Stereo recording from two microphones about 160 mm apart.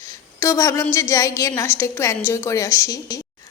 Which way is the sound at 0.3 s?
20° left (ahead or behind).